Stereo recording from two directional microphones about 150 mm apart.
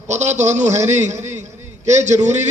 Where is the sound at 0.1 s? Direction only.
50° right (ahead or behind).